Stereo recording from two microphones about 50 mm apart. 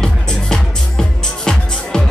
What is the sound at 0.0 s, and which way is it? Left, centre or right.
Music, centre.